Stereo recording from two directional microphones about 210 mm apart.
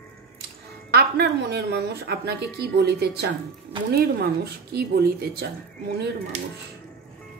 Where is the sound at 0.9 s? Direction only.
50° right (ahead or behind).